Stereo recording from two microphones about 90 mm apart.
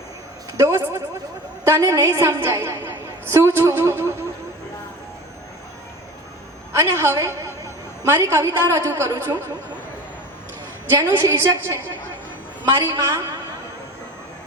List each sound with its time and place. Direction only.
0.6 s a sound: 30° right (ahead or behind)
1.6 s a woman's voice: 30° right (ahead or behind)
6.7 s a woman's voice: 30° right (ahead or behind)
10.8 s a woman's voice: 25° right (ahead or behind)
12.8 s a woman's voice: 35° right (ahead or behind)